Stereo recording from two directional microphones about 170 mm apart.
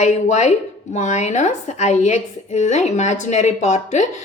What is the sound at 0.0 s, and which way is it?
Speech, 45° left (ahead or behind).